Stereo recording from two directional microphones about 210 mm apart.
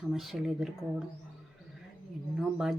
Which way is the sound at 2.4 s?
Centre (ahead or behind).